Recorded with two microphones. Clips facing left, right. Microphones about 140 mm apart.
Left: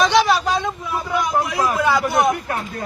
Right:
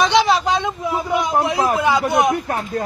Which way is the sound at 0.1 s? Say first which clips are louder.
Right 1 dB; 20° right (ahead or behind).